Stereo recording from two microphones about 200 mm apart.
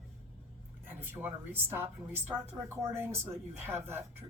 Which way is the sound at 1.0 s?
10° right (ahead or behind).